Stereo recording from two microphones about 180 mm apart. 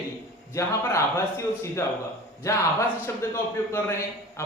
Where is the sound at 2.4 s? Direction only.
15° left (ahead or behind).